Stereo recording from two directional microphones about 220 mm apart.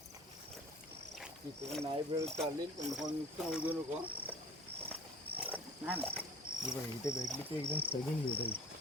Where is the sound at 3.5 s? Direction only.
5° right (ahead or behind).